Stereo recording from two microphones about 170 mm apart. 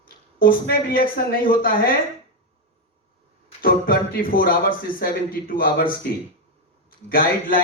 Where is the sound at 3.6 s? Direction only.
60° left (ahead or behind).